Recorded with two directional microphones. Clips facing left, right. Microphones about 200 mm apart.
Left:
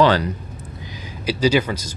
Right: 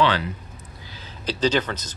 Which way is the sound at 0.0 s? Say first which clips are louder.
Left 5 dB; 40° left (ahead or behind).